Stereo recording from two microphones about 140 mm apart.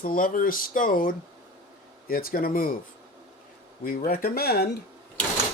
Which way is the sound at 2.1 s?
90° left.